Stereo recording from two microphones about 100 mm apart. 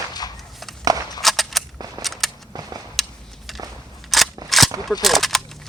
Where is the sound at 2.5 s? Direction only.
40° right (ahead or behind).